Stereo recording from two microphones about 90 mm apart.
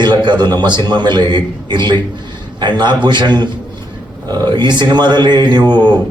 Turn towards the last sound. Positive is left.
turn(degrees=-55)  # may be behind; listen again after turning